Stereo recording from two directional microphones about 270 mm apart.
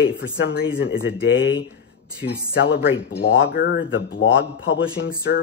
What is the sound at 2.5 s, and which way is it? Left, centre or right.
Speech, left.